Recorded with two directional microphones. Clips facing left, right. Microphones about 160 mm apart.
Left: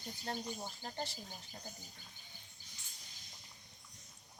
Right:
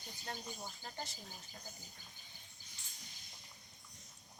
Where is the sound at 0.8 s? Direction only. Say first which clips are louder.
Left 4 dB; 35° left (ahead or behind).